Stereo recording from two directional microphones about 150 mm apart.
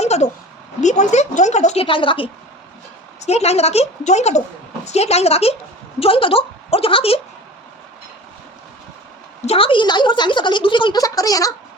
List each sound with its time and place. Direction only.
0.0 s a sound: 45° left (ahead or behind)
0.8 s a woman's voice: 55° left (ahead or behind); by 2.3 s 35° left (ahead or behind)
3.2 s a woman's voice: 45° left (ahead or behind)
9.5 s a woman's voice: 35° left (ahead or behind)